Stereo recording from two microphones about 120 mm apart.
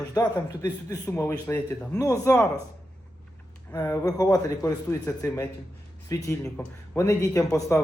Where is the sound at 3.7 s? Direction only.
25° left (ahead or behind).